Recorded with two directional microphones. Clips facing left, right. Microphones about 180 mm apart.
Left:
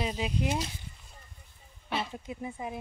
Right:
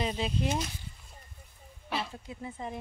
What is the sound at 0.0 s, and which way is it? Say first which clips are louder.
Speech: even; 10° left (ahead or behind).